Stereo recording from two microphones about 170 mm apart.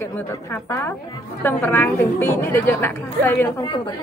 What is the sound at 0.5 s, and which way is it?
A woman's voice, 10° left (ahead or behind).